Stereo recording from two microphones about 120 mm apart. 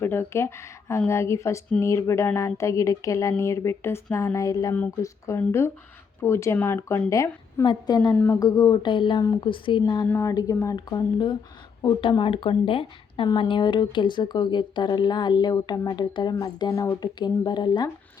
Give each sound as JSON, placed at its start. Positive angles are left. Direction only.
{"t": 0.0, "sound": "speech", "side_deg": 20}
{"t": 7.6, "sound": "speech", "side_deg": 40}
{"t": 8.1, "sound": "speech", "side_deg": 15}
{"t": 8.4, "sound": "speech", "side_deg": 30}
{"t": 10.1, "sound": "speech", "side_deg": 20}
{"t": 10.8, "sound": "speech", "side_deg": 35}